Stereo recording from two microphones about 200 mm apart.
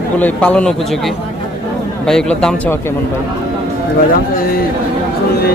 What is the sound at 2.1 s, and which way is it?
Speech, 5° left (ahead or behind).